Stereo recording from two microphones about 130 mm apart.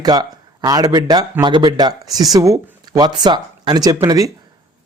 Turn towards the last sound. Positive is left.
turn(degrees=-25)  # may be behind; listen again after turning